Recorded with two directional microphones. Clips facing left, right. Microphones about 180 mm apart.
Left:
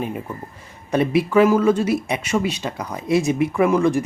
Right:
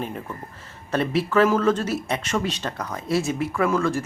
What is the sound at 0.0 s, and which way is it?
Speech, 10° left (ahead or behind).